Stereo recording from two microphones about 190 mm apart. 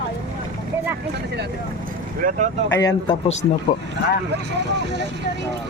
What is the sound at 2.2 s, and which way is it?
Speech, 45° right (ahead or behind).